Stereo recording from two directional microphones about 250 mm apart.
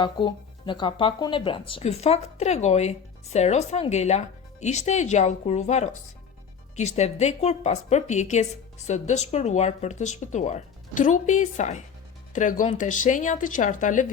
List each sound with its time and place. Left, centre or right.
0.0 s speech: centre